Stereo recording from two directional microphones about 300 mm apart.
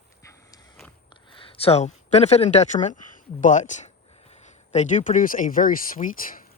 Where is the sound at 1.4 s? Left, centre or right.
Centre.